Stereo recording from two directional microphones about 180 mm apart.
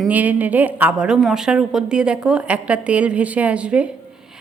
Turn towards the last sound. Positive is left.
turn(degrees=-5)  # may be behind; listen again after turning